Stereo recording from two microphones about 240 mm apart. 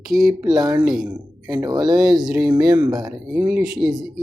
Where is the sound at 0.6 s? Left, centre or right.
Centre.